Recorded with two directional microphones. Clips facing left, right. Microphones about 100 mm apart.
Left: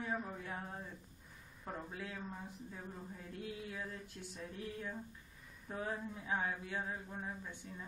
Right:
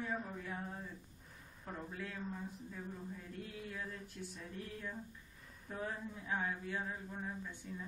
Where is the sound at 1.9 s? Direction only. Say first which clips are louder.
Even; 10° left (ahead or behind).